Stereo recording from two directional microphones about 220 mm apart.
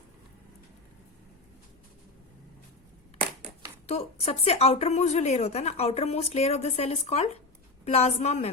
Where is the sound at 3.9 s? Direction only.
30° left (ahead or behind).